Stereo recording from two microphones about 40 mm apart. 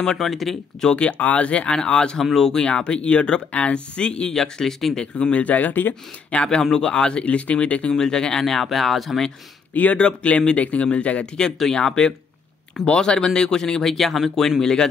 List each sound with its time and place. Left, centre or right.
0.0 s speech: centre
1.1 s speech: left; by 2.6 s centre
2.6 s speech: left
4.3 s speech: centre
5.0 s speech: left
5.4 s speech: left
5.7 s speech: left
6.3 s speech: left
7.9 s speech: centre
9.9 s speech: left
11.7 s speech: centre
13.9 s speech: centre
14.6 s speech: centre